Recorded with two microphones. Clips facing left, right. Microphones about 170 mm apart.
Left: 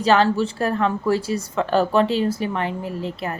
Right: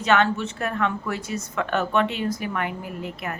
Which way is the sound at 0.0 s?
35° left (ahead or behind).